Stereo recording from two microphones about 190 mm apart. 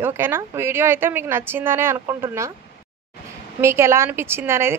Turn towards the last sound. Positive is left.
turn(degrees=-10)  # may be behind; listen again after turning